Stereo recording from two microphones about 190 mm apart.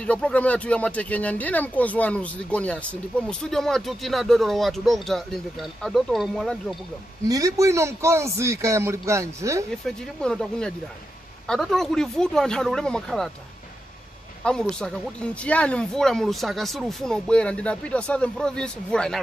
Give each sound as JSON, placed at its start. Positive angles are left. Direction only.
{"t": 0.0, "sound": "speech", "side_deg": 5}
{"t": 7.2, "sound": "a man's voice", "side_deg": -20}
{"t": 9.8, "sound": "speech", "side_deg": 5}
{"t": 14.4, "sound": "speech", "side_deg": 5}